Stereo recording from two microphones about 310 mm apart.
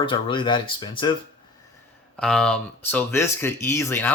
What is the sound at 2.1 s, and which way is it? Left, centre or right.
Speech, centre.